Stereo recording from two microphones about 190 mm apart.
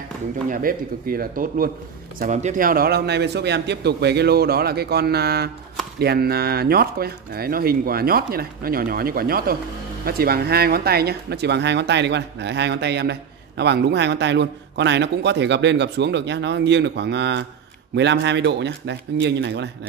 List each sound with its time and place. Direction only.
0.5 s speech: 45° right (ahead or behind); by 19.7 s 65° right (ahead or behind)